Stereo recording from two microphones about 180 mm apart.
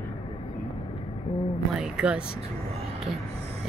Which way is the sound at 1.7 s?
5° right (ahead or behind).